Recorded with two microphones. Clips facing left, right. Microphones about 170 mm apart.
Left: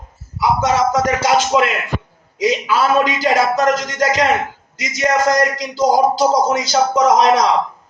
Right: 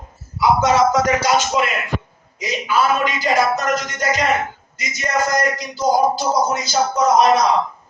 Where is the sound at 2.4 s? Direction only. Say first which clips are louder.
Left 3 dB; 90° left.